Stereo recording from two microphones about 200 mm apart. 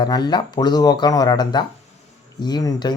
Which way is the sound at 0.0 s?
20° left (ahead or behind).